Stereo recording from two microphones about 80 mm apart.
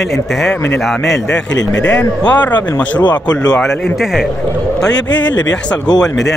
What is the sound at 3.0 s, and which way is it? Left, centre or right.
Speech, left.